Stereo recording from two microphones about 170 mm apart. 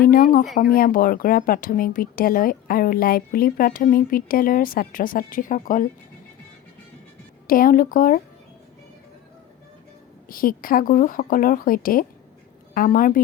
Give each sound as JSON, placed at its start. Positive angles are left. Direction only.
{"t": 0.1, "sound": "a woman's voice", "side_deg": 55}
{"t": 7.4, "sound": "speech", "side_deg": 55}
{"t": 10.2, "sound": "a woman's voice", "side_deg": 55}